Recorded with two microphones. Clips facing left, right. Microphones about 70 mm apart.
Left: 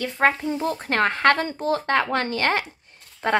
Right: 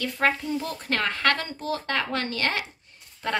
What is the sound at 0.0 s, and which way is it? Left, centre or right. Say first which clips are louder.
Speech: left 4 dB; left.